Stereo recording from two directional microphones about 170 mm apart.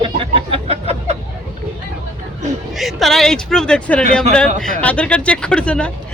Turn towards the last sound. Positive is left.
turn(degrees=5)  # may be behind; listen again after turning